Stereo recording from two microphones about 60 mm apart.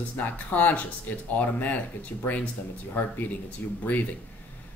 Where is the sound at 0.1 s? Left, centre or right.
Left.